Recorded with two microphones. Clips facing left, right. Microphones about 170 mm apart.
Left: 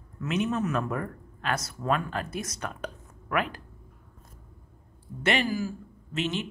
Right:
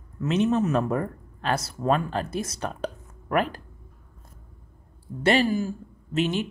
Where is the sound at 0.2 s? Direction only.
30° right (ahead or behind).